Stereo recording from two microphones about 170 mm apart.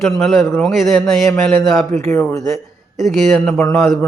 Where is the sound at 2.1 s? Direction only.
15° left (ahead or behind).